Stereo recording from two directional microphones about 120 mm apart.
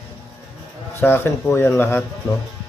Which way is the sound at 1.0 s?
20° left (ahead or behind).